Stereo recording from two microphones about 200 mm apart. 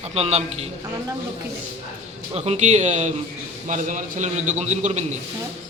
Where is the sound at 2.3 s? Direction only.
30° right (ahead or behind).